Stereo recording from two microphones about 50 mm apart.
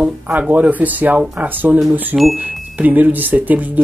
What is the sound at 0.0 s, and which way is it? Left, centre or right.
Speech, right.